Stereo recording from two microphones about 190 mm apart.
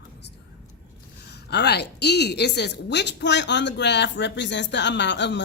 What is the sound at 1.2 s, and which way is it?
A woman's voice, 60° left (ahead or behind).